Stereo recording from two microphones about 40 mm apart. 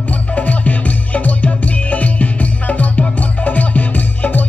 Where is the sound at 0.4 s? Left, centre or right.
Left.